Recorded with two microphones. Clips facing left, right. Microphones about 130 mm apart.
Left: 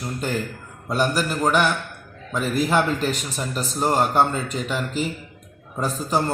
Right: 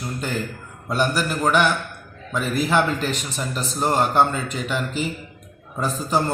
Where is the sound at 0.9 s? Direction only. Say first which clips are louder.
Even; centre (ahead or behind).